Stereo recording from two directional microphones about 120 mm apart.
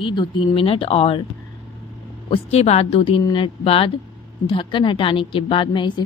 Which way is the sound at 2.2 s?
55° left (ahead or behind).